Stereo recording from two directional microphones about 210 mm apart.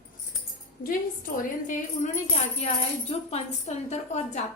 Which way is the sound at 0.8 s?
40° left (ahead or behind).